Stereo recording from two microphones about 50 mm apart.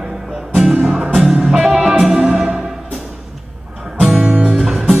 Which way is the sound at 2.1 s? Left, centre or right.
Right.